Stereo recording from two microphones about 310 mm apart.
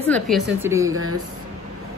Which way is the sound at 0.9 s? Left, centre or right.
Right.